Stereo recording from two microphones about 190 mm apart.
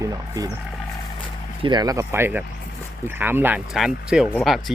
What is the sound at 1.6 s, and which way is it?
Speech, 25° right (ahead or behind).